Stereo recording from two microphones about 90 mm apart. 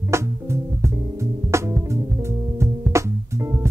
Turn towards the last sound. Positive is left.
turn(degrees=-30)  # may be behind; listen again after turning